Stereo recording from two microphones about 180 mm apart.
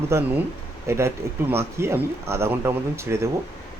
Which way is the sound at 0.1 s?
10° right (ahead or behind).